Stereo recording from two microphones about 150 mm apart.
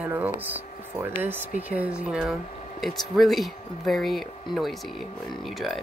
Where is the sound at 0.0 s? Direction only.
10° right (ahead or behind).